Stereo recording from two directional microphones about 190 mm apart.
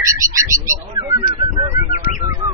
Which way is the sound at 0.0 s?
15° right (ahead or behind).